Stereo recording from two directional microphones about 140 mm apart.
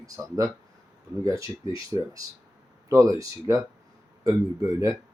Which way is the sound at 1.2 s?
25° right (ahead or behind).